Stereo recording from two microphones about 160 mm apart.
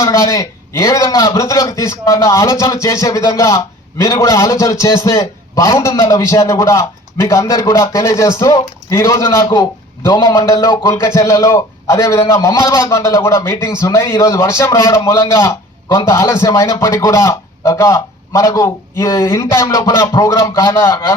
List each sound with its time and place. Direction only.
0.0 s a man's voice: 20° left (ahead or behind)